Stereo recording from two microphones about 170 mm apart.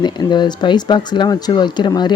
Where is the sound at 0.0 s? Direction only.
25° left (ahead or behind).